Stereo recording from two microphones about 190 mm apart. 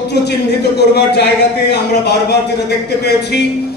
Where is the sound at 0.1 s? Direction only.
60° left (ahead or behind).